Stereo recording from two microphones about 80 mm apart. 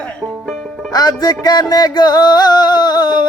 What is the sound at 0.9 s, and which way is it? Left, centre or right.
Music, left.